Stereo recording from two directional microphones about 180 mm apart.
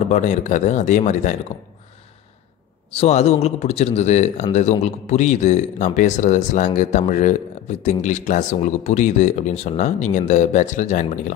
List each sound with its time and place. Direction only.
0.1 s speech: 40° left (ahead or behind)
2.9 s speech: 35° left (ahead or behind)